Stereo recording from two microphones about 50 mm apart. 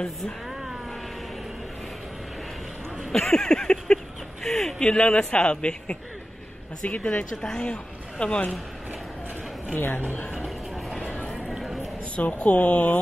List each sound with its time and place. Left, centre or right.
0.5 s vehicle: centre
3.1 s speech: centre
4.8 s a man's voice: left
9.8 s speech: left
11.1 s clip-clop: centre
12.2 s speech: left